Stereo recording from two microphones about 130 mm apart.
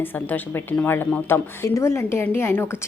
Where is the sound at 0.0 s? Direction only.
15° left (ahead or behind).